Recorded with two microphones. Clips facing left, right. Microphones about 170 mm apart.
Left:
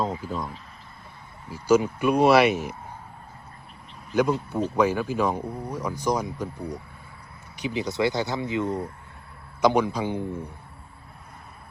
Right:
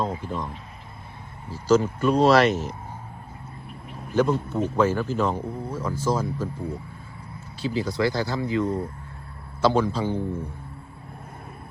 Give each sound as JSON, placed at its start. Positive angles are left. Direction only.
{"t": 0.2, "sound": "speech", "side_deg": 5}
{"t": 4.1, "sound": "speech", "side_deg": 10}
{"t": 7.6, "sound": "speech", "side_deg": 20}